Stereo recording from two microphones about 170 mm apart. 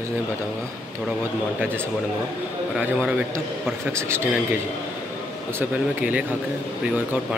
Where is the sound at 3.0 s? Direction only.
10° right (ahead or behind).